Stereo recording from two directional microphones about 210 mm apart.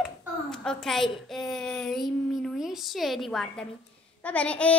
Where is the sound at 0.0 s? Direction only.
Centre (ahead or behind).